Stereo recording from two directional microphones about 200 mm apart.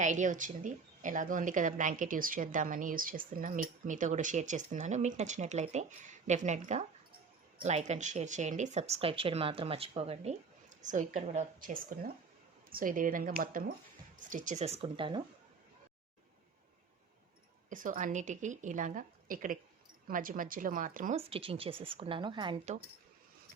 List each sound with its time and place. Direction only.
0.0 s a woman's voice: 40° right (ahead or behind)
17.7 s a woman's voice: 40° right (ahead or behind)
21.2 s a woman's voice: 30° right (ahead or behind)